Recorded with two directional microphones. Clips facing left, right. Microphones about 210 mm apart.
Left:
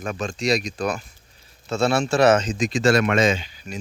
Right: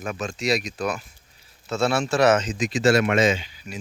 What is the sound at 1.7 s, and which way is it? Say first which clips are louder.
Speech: left 2 dB; 30° left (ahead or behind).